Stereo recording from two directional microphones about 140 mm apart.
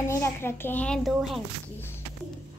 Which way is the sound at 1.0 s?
Centre (ahead or behind).